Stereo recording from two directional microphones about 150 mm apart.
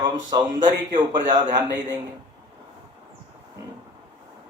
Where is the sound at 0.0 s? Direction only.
30° right (ahead or behind).